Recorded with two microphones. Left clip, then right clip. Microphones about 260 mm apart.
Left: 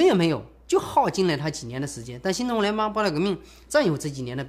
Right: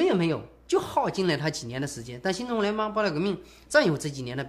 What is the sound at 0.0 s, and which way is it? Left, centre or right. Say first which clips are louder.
Speech: left 4 dB; left.